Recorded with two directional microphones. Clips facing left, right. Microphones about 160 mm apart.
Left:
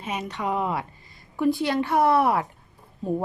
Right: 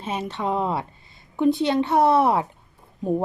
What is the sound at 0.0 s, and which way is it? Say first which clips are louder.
A woman's voice: right 2 dB; 30° right (ahead or behind).